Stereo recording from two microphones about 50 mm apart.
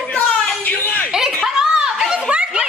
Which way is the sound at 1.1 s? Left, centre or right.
Centre.